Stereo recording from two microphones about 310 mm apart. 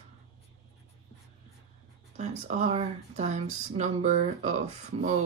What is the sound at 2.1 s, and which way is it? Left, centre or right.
Speech, right.